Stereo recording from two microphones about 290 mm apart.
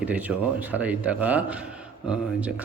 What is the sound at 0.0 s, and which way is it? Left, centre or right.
A man's voice, centre.